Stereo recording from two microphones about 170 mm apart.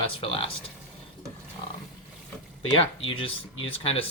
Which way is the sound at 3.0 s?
30° left (ahead or behind).